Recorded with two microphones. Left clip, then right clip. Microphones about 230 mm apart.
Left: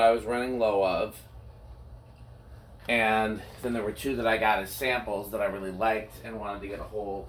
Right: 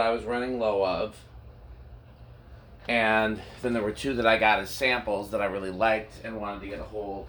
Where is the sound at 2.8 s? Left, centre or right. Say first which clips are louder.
Right 1 dB; right.